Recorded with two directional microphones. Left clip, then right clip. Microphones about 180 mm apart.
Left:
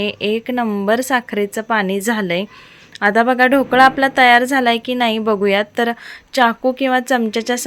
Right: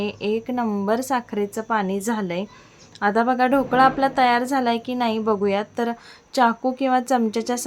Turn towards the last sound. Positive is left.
turn(degrees=5)  # may be behind; listen again after turning